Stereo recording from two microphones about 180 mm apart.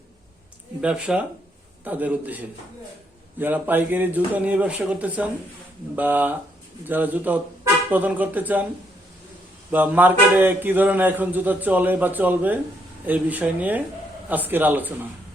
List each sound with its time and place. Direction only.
0.8 s speech: 5° right (ahead or behind)
9.7 s speech: 10° right (ahead or behind)